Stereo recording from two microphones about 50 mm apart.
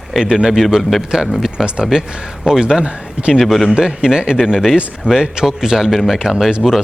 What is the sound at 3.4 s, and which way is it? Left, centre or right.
Speech, centre.